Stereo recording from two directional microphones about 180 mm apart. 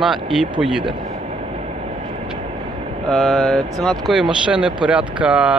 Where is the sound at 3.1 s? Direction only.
5° left (ahead or behind).